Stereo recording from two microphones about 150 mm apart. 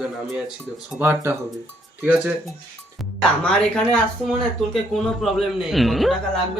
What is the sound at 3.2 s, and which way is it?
Speech, 5° left (ahead or behind).